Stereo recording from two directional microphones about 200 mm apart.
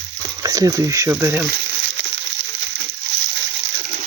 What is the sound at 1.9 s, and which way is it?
Crushing, 65° right (ahead or behind).